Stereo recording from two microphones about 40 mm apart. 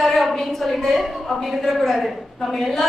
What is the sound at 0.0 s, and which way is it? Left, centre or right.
A woman's voice, centre.